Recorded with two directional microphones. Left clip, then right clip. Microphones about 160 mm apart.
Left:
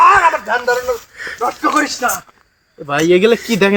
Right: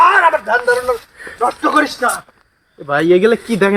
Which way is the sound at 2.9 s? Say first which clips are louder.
Even; 75° left (ahead or behind).